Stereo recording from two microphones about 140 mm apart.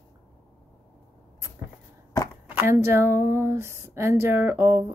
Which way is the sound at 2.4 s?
15° right (ahead or behind).